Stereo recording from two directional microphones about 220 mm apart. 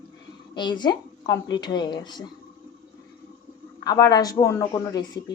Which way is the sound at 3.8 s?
15° left (ahead or behind).